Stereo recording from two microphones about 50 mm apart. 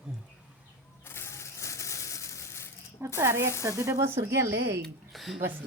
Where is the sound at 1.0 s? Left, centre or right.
Left.